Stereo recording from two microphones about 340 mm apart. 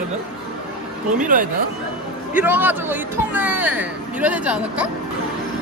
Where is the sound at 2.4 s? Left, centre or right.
Centre.